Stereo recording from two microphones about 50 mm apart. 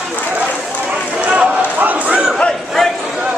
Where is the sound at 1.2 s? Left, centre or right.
Right.